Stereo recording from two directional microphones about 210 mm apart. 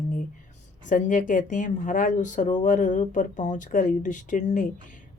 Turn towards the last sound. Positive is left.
turn(degrees=35)  # may be behind; listen again after turning